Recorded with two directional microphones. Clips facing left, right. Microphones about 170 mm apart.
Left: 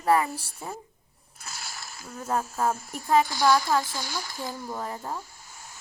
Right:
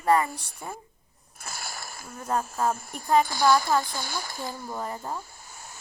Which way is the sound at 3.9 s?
50° right (ahead or behind).